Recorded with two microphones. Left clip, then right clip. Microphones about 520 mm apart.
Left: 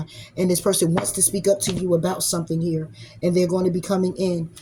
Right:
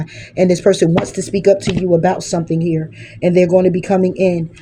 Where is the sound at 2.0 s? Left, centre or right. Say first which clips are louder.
Right 9 dB; left.